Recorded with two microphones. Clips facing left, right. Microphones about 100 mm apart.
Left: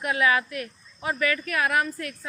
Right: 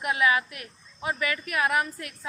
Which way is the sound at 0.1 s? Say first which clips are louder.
Left 1 dB; 20° right (ahead or behind).